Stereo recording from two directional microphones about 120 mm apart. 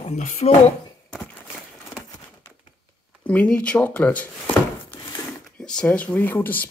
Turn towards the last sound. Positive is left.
turn(degrees=15)  # may be behind; listen again after turning